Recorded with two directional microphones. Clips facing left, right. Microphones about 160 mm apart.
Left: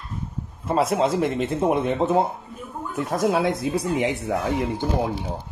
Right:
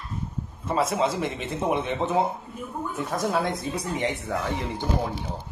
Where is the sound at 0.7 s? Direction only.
Centre (ahead or behind).